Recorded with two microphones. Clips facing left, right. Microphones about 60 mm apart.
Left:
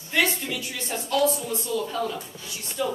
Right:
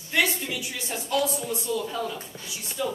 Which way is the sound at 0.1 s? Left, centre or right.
Centre.